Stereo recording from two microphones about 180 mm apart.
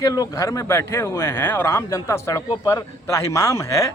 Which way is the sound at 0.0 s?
20° left (ahead or behind).